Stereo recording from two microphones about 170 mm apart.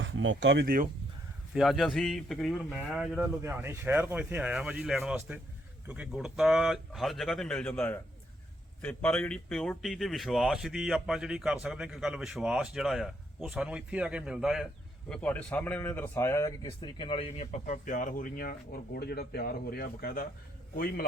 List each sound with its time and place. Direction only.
0.0 s speech: 90° right; by 0.9 s 60° right (ahead or behind)
1.5 s speech: centre (ahead or behind)
3.4 s speech: 15° right (ahead or behind)
15.1 s speech: 10° left (ahead or behind)
16.8 s speech: 30° left (ahead or behind); by 21.0 s 60° left (ahead or behind)